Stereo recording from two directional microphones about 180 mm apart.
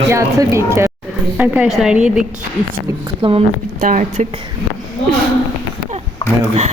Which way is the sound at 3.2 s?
30° right (ahead or behind).